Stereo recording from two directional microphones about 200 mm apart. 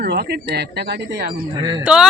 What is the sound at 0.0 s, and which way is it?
Speech, 55° right (ahead or behind).